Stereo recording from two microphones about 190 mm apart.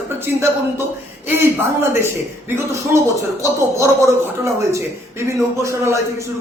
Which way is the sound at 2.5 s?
15° right (ahead or behind).